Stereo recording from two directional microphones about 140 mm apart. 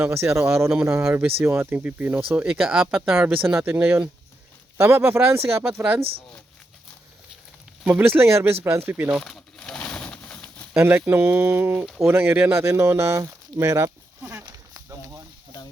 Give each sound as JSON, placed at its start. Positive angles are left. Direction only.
{"t": 0.0, "sound": "speech", "side_deg": -20}
{"t": 7.9, "sound": "speech", "side_deg": -10}
{"t": 8.6, "sound": "a sound", "side_deg": -20}
{"t": 10.8, "sound": "speech", "side_deg": -15}